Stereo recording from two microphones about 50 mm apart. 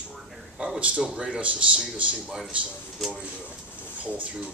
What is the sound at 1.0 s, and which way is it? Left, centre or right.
Speech, centre.